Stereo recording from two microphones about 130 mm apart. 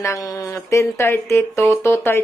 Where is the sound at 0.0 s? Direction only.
25° left (ahead or behind).